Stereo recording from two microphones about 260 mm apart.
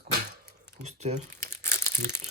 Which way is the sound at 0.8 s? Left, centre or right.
Right.